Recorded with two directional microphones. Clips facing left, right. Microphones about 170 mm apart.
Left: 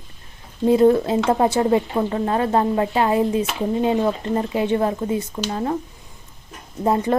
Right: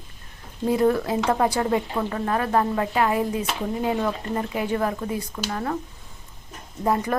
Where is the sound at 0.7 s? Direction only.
25° left (ahead or behind).